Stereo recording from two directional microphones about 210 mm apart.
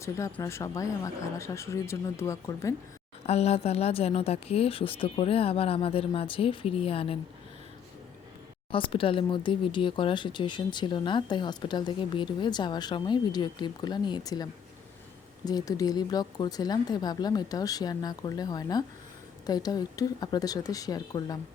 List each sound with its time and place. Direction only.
0.0 s speech: 15° left (ahead or behind)
3.2 s speech: 30° left (ahead or behind)
8.7 s speech: 25° left (ahead or behind)
15.4 s speech: 15° left (ahead or behind)